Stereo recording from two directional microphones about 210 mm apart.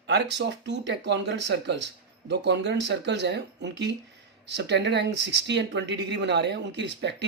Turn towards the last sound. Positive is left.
turn(degrees=-55)  # may be behind; listen again after turning